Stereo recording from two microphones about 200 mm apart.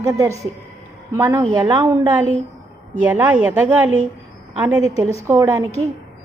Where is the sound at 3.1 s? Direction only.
10° right (ahead or behind).